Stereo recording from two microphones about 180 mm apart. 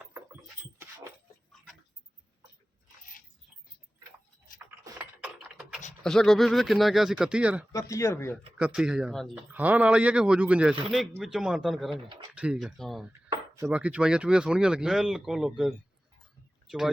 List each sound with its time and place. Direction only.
6.0 s speech: 5° left (ahead or behind)
7.7 s speech: 15° left (ahead or behind)
8.5 s speech: 5° right (ahead or behind)